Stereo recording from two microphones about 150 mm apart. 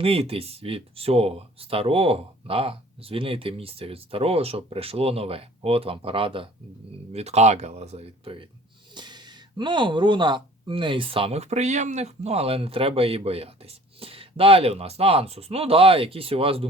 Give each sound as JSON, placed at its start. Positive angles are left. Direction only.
{"t": 0.0, "sound": "speech", "side_deg": -40}